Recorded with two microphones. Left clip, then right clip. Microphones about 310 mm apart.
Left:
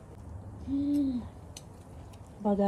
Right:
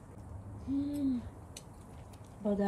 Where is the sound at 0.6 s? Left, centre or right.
Centre.